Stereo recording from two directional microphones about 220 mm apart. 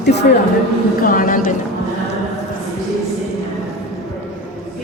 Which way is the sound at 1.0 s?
40° left (ahead or behind).